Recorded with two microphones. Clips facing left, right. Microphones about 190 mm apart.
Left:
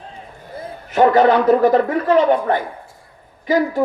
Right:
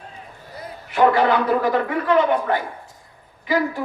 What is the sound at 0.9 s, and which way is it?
Speech, 40° left (ahead or behind).